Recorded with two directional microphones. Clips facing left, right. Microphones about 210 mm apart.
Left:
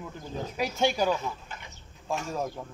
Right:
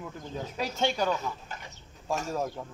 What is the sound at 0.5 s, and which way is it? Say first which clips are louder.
Speech: left 3 dB; 10° left (ahead or behind).